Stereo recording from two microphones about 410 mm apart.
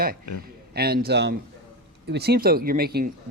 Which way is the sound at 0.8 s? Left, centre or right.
Right.